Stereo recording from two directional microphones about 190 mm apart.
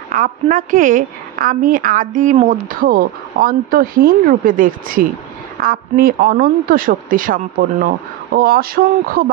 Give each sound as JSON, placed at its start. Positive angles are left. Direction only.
{"t": 0.1, "sound": "speech", "side_deg": -45}